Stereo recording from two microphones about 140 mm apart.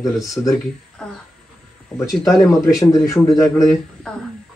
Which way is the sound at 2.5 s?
25° left (ahead or behind).